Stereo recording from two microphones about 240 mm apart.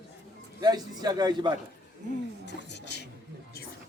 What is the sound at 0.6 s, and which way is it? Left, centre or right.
Speech, centre.